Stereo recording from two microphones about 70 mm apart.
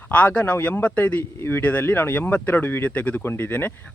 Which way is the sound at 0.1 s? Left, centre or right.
Left.